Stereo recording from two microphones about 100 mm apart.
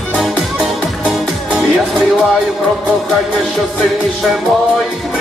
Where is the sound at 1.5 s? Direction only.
Centre (ahead or behind).